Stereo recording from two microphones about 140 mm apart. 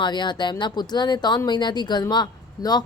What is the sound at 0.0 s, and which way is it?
A woman's voice, 35° left (ahead or behind).